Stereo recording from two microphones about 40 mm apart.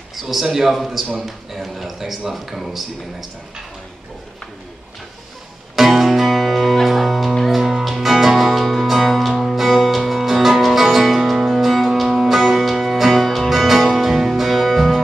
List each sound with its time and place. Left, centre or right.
0.1 s speech: centre
5.8 s music: centre